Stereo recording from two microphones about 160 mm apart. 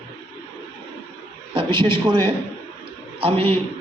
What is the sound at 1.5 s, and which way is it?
A man's voice, 30° right (ahead or behind).